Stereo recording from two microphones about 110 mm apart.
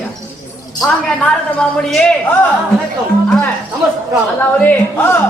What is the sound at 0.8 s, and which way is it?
A woman's voice, 5° left (ahead or behind).